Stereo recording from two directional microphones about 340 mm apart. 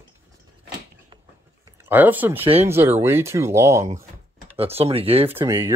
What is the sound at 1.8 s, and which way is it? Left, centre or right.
Speech, centre.